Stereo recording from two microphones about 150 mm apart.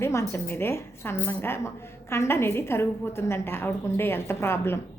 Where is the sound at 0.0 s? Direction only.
20° left (ahead or behind).